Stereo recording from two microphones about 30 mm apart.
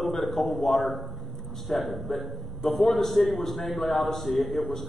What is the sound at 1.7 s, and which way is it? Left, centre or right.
A man's voice, centre.